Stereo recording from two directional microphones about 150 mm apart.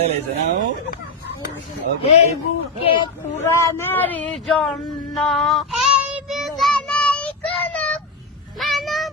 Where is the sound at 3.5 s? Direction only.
15° left (ahead or behind).